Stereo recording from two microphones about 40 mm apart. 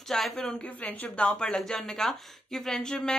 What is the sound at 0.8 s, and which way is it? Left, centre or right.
Speech, left.